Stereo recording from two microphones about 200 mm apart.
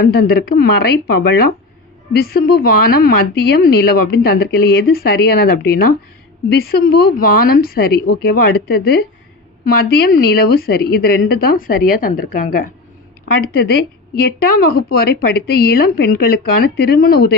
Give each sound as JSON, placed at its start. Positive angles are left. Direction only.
{"t": 0.0, "sound": "speech", "side_deg": 50}